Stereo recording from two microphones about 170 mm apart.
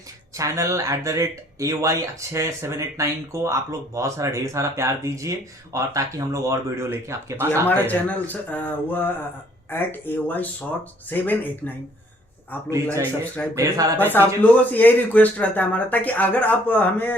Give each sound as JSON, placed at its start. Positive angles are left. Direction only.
{"t": 0.3, "sound": "speech", "side_deg": -20}
{"t": 7.7, "sound": "speech", "side_deg": 10}
{"t": 12.7, "sound": "speech", "side_deg": -15}
{"t": 13.4, "sound": "speech", "side_deg": 10}